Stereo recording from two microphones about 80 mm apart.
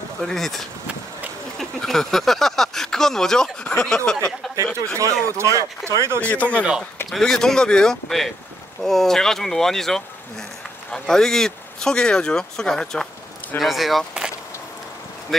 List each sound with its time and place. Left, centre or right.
0.2 s speech: centre
4.7 s speech: right
6.2 s speech: centre
7.1 s speech: centre